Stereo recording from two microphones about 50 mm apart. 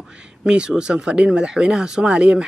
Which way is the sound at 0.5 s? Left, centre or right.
Centre.